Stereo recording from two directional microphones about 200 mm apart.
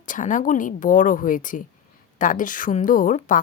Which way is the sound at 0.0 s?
40° left (ahead or behind).